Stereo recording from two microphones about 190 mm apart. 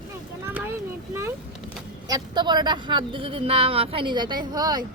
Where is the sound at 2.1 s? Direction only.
20° right (ahead or behind).